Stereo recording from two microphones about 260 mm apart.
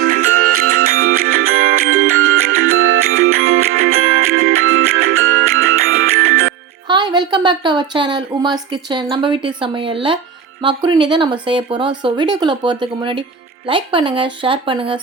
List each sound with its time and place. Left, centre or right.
0.0 s music: right
0.9 s music: right
1.4 s music: right
6.8 s a woman's voice: centre